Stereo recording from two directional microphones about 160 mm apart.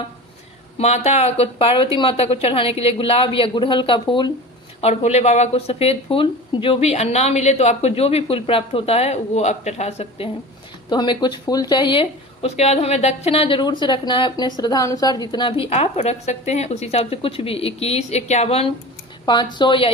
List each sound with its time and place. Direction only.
0.8 s speech: 45° left (ahead or behind)
4.8 s speech: 45° left (ahead or behind)
10.8 s speech: 25° left (ahead or behind)
19.2 s speech: 25° left (ahead or behind)